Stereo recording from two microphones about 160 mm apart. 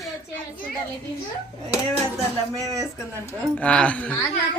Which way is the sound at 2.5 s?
20° right (ahead or behind).